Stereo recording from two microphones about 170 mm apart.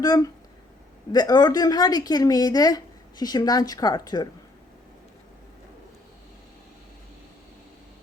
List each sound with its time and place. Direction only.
0.0 s a woman's voice: 20° left (ahead or behind)